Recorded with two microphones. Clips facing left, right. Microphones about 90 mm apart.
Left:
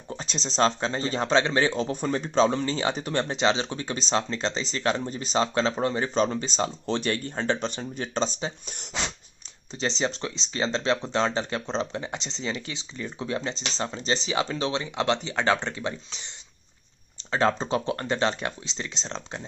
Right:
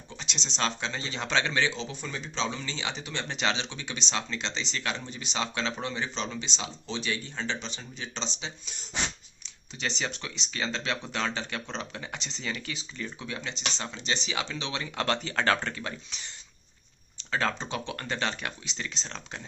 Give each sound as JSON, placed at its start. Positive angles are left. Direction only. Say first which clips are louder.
{"t": 0.1, "sound": "speech", "louder": "left 6 dB", "side_deg": 40}
{"t": 1.7, "sound": "speech", "louder": "left 10 dB", "side_deg": 50}
{"t": 3.3, "sound": "speech", "louder": "left 3 dB", "side_deg": 30}
{"t": 9.7, "sound": "speech", "louder": "left 6 dB", "side_deg": 30}
{"t": 17.3, "sound": "speech", "louder": "left 6 dB", "side_deg": 30}